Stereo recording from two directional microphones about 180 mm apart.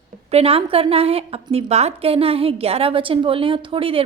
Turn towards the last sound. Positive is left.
turn(degrees=-30)  # may be behind; listen again after turning